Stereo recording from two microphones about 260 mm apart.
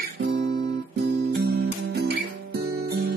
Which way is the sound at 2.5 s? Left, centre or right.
Right.